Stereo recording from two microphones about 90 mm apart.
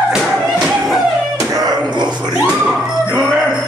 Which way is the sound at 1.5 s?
50° right (ahead or behind).